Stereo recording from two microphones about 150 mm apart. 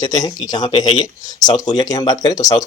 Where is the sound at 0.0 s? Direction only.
25° left (ahead or behind).